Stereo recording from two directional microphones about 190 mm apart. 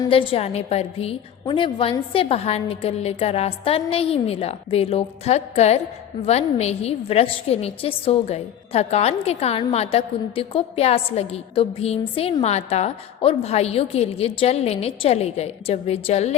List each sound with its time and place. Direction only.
0.0 s a woman's voice: 25° left (ahead or behind)